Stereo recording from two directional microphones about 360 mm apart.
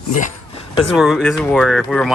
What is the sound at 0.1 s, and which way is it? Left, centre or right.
Speech, centre.